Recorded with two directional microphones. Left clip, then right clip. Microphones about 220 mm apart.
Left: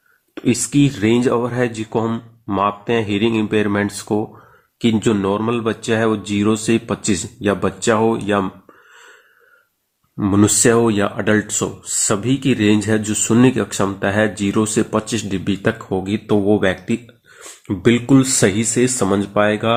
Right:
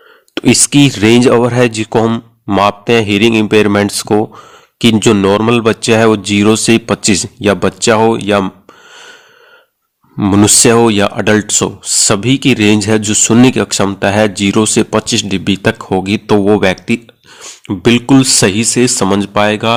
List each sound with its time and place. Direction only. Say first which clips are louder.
0.3 s speech: right 8 dB; 45° right (ahead or behind)
10.2 s speech: right 7 dB; 45° right (ahead or behind)